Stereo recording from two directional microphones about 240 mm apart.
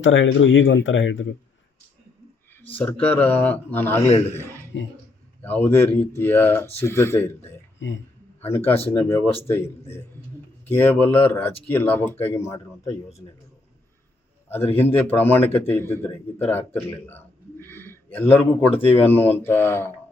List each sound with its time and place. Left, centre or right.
0.0 s speech: left
2.6 s speech: centre
4.7 s speech: left
5.4 s speech: centre
14.4 s a sound: centre
14.8 s speech: centre
18.7 s speech: left
19.0 s speech: centre